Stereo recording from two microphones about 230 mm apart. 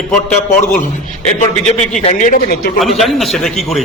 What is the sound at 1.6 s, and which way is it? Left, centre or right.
Speech, left.